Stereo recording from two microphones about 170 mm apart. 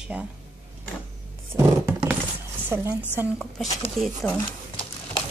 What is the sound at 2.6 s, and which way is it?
Speech, 15° right (ahead or behind).